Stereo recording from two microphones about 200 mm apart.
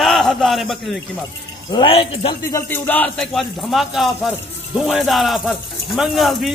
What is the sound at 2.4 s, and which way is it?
Speech, 15° left (ahead or behind).